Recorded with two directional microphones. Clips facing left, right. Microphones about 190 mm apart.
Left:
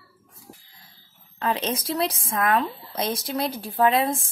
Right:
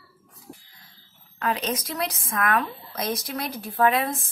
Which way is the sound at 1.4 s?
25° left (ahead or behind).